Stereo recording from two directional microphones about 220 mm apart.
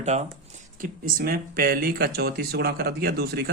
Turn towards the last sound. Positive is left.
turn(degrees=-45)  # may be behind; listen again after turning